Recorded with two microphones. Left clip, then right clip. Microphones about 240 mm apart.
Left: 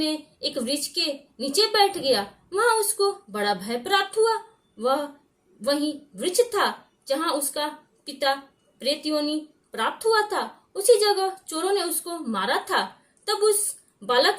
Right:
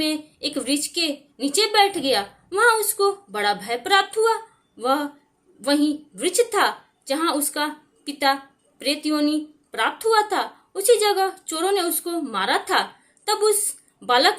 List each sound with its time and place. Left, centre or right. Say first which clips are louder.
0.5 s a woman's voice: right 3 dB; right
2.6 s speech: right 4 dB; right
3.0 s a woman's voice: right 3 dB; right